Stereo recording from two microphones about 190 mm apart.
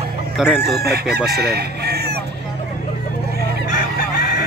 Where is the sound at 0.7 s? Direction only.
55° right (ahead or behind).